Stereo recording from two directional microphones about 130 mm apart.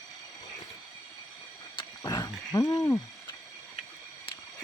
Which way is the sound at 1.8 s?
30° left (ahead or behind).